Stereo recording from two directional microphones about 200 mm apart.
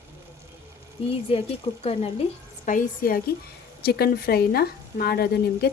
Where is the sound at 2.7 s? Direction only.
45° left (ahead or behind).